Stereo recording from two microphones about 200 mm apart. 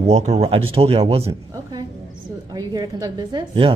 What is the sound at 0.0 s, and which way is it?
Speech, 35° right (ahead or behind).